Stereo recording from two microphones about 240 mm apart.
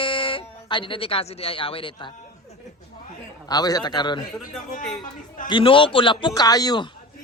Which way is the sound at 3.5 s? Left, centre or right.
Centre.